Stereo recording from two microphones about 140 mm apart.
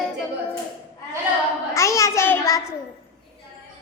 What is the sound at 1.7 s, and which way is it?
Speech, 20° left (ahead or behind).